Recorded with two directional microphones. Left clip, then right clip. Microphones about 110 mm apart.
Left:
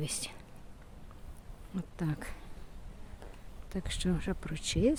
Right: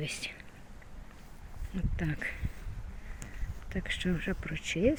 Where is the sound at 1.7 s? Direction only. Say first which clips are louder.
Right 1 dB; 25° left (ahead or behind).